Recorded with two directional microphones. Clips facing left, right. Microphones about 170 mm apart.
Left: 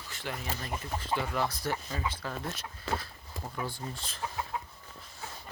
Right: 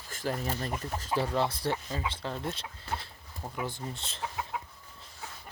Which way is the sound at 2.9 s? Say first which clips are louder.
Left 3 dB; 90° left.